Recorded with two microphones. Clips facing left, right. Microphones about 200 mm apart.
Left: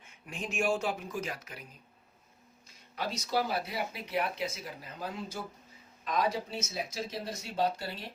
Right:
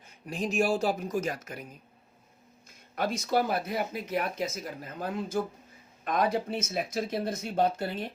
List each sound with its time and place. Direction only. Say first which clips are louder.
0.0 s speech: right 8 dB; 35° right (ahead or behind)
2.6 s speech: right 6 dB; 50° right (ahead or behind)